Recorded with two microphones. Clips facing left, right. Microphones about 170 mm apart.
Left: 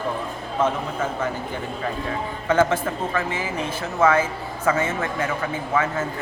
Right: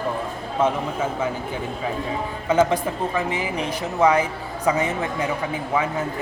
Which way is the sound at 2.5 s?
15° right (ahead or behind).